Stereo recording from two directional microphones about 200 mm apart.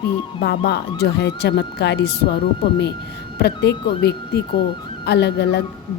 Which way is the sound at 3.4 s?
55° left (ahead or behind).